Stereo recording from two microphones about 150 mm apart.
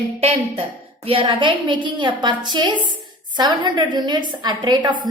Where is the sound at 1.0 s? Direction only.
35° right (ahead or behind).